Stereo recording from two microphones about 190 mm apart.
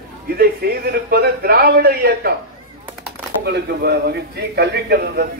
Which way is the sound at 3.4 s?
60° right (ahead or behind).